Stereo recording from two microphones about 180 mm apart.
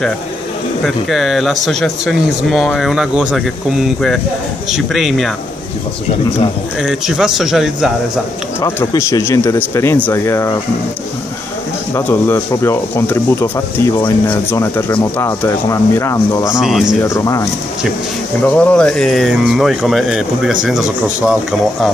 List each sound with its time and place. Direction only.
0.8 s speech: centre (ahead or behind)
6.8 s speech: centre (ahead or behind)
8.5 s speech: 15° left (ahead or behind)
11.9 s speech: 15° left (ahead or behind)
16.5 s speech: centre (ahead or behind)
17.0 s speech: 15° left (ahead or behind)
18.4 s speech: 5° left (ahead or behind)